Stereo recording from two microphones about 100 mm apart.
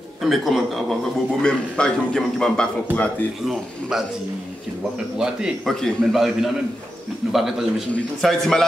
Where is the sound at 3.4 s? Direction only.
5° right (ahead or behind).